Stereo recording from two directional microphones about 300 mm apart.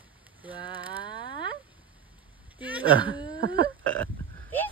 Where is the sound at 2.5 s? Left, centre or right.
Centre.